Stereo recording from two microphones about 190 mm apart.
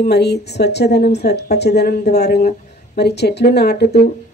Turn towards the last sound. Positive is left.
turn(degrees=60)  # may be behind; listen again after turning